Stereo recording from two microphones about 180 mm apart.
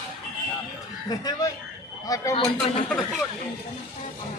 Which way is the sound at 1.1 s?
20° left (ahead or behind).